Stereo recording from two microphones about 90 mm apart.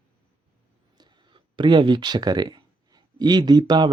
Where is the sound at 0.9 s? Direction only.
60° right (ahead or behind).